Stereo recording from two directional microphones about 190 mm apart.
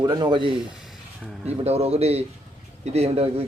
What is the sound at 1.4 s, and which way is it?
A man's voice, 35° right (ahead or behind).